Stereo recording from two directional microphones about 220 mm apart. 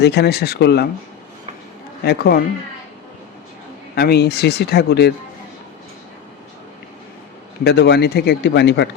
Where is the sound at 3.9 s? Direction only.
45° left (ahead or behind).